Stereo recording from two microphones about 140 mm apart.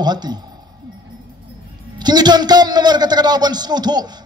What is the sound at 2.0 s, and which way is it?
A man's voice, 30° right (ahead or behind).